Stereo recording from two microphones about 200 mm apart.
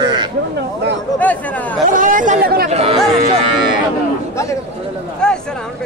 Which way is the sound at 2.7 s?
30° right (ahead or behind).